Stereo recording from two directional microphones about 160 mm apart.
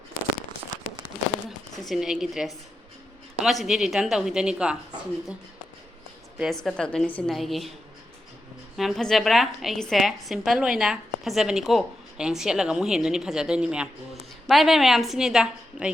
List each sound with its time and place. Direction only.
1.9 s a woman's voice: 5° right (ahead or behind)
6.4 s a woman's voice: centre (ahead or behind)
8.8 s a woman's voice: centre (ahead or behind)